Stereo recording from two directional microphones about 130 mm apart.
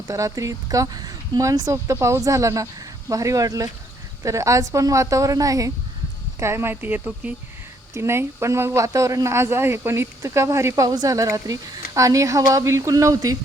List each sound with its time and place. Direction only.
0.1 s speech: 25° right (ahead or behind)